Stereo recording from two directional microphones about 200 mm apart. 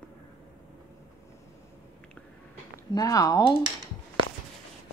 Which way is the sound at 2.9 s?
20° left (ahead or behind).